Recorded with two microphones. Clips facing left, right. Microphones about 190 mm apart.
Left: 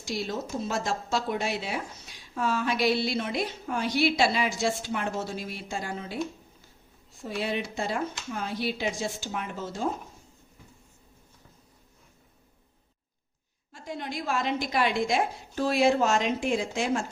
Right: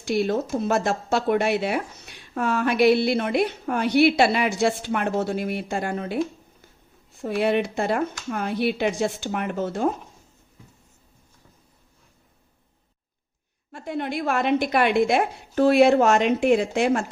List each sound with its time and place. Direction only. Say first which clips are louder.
0.0 s speech: right 9 dB; 60° right (ahead or behind)
7.2 s speech: right 9 dB; 60° right (ahead or behind)
13.7 s speech: right 7 dB; 60° right (ahead or behind)